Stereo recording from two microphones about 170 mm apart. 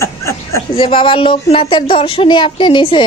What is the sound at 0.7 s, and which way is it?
A man's voice, 30° left (ahead or behind).